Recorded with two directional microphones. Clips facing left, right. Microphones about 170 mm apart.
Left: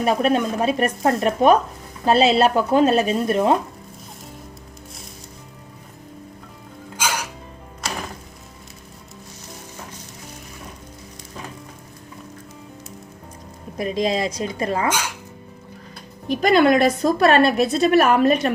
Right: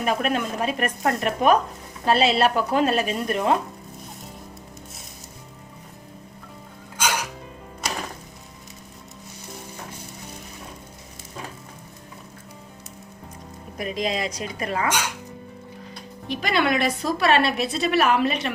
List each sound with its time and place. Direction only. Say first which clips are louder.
0.0 s speech: left 5 dB; 30° left (ahead or behind)
13.7 s speech: left 5 dB; 35° left (ahead or behind)
16.2 s a woman's voice: left 8 dB; 45° left (ahead or behind)